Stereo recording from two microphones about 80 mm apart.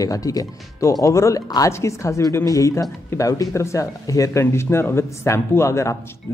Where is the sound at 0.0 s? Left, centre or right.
Left.